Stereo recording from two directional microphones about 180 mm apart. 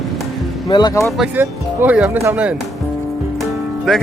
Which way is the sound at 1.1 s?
5° right (ahead or behind).